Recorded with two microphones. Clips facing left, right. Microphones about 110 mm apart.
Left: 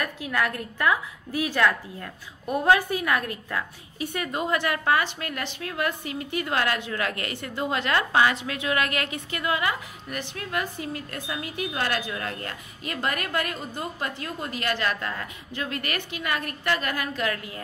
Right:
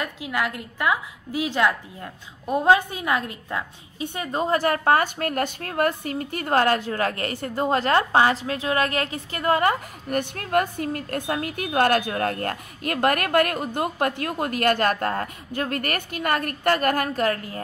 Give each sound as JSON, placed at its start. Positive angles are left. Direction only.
{"t": 0.0, "sound": "a woman's voice", "side_deg": -15}